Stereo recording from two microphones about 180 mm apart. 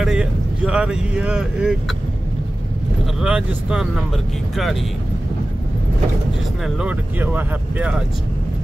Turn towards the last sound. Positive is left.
turn(degrees=-10)  # may be behind; listen again after turning